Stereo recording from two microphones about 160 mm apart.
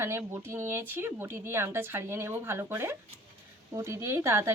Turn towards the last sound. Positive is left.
turn(degrees=-15)  # may be behind; listen again after turning